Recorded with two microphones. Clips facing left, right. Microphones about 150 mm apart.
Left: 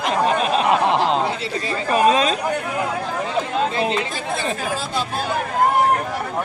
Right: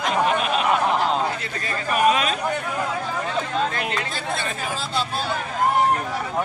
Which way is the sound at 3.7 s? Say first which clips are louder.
Left 6 dB; 25° left (ahead or behind).